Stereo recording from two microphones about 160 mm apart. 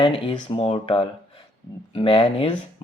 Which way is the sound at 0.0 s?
30° left (ahead or behind).